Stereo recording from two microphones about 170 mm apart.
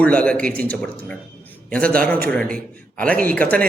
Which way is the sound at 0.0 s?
5° left (ahead or behind).